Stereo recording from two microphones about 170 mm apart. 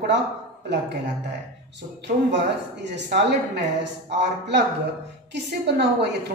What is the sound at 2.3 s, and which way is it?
A woman's voice, 90° right.